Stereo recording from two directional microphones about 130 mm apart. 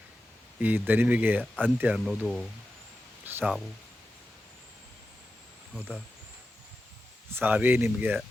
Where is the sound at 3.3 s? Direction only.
15° right (ahead or behind).